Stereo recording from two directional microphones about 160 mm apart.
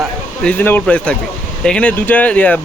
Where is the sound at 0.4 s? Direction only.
10° left (ahead or behind).